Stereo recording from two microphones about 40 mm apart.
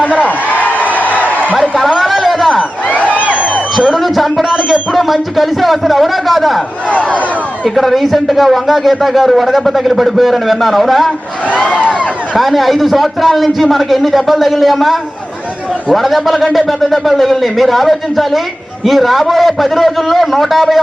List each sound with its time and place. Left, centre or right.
0.6 s a sound: left
2.1 s a sound: centre
3.9 s a man's voice: centre
4.4 s music: centre
4.9 s speech: centre
7.8 s speech: centre
11.5 s a sound: centre
11.8 s speech: left
12.4 s speech: centre